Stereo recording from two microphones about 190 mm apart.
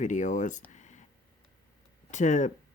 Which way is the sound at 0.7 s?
40° left (ahead or behind).